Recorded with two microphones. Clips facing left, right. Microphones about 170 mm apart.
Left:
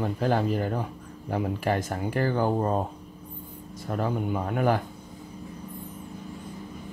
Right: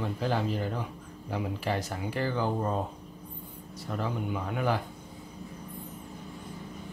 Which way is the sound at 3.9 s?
45° left (ahead or behind).